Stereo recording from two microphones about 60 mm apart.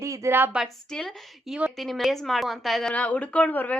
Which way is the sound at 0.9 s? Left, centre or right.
Centre.